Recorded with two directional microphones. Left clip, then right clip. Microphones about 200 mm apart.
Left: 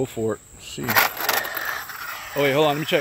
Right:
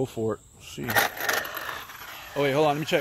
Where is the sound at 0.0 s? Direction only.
10° right (ahead or behind).